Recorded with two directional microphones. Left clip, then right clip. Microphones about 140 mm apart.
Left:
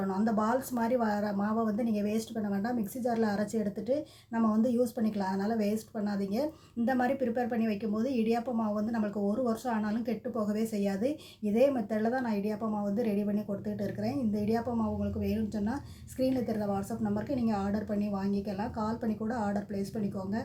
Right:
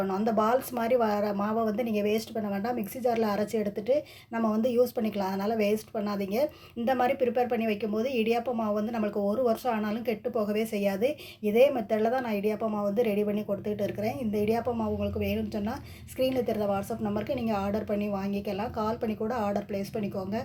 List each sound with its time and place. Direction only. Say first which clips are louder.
0.1 s speech: right 3 dB; 10° right (ahead or behind)